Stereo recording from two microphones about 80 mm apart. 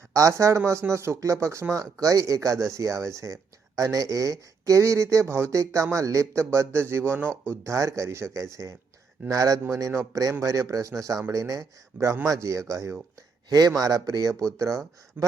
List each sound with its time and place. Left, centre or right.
0.1 s a man's voice: right
13.5 s a man's voice: right
15.2 s speech: right